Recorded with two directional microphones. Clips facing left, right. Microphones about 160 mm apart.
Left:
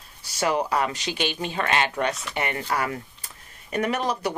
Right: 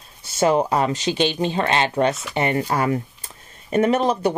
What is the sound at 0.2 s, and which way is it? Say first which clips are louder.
Speech: right 6 dB; 25° right (ahead or behind).